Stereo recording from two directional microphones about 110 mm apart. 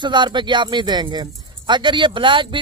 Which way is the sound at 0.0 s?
45° right (ahead or behind).